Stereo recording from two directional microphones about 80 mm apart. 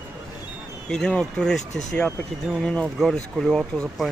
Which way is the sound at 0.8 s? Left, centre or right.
Centre.